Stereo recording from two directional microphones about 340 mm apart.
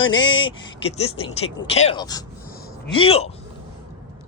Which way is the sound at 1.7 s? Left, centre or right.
Centre.